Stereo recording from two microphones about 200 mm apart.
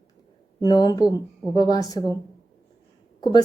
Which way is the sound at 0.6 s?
20° left (ahead or behind).